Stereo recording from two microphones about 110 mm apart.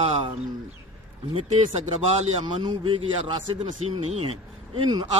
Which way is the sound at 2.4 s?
45° right (ahead or behind).